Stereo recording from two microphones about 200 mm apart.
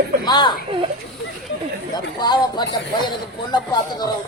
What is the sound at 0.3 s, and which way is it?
Speech, 20° left (ahead or behind).